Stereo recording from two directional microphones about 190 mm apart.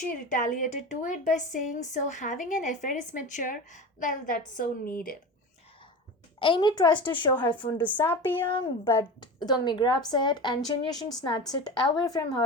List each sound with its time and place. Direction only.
0.3 s a woman's voice: 45° left (ahead or behind)
6.4 s speech: 25° left (ahead or behind)
7.5 s speech: 10° left (ahead or behind)
8.4 s speech: 25° left (ahead or behind)